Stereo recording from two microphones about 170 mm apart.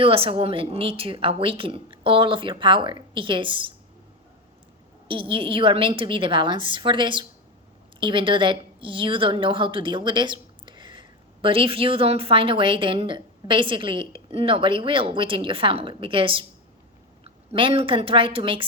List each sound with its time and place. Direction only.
0.0 s a woman's voice: 35° right (ahead or behind)
5.0 s a woman's voice: 30° right (ahead or behind)